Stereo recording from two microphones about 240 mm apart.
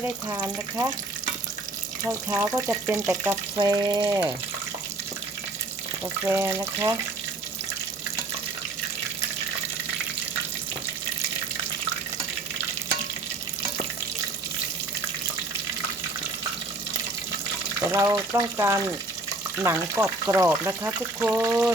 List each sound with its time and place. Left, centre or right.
0.0 s frying: centre
2.0 s frying: centre
6.2 s frying: centre
17.7 s frying: centre